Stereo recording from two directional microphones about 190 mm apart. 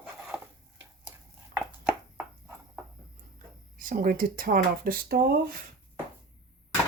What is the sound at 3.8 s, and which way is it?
Speech, 45° right (ahead or behind).